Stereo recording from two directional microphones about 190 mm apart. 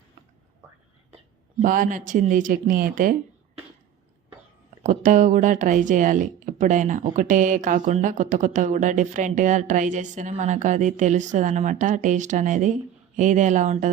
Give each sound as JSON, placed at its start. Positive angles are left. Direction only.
{"t": 1.6, "sound": "speech", "side_deg": -45}
{"t": 4.8, "sound": "speech", "side_deg": -40}